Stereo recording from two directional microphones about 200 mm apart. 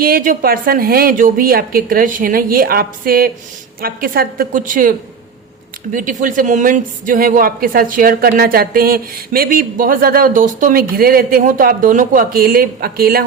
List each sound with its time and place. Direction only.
0.0 s speech: 45° right (ahead or behind)